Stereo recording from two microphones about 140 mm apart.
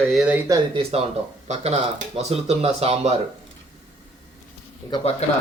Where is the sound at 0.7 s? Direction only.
45° right (ahead or behind).